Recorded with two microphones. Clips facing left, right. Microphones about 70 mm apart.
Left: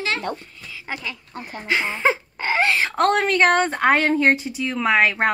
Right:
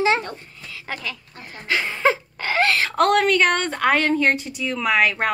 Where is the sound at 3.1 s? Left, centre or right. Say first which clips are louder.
Left 1 dB; centre.